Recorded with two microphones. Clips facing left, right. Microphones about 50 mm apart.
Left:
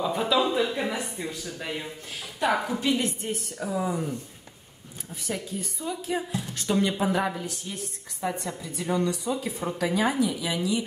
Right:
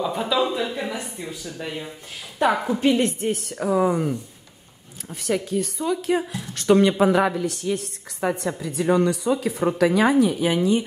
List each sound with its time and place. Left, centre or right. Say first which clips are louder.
0.0 s speech: right 2 dB; centre
2.8 s a woman's voice: right 7 dB; right
5.2 s a woman's voice: right 9 dB; right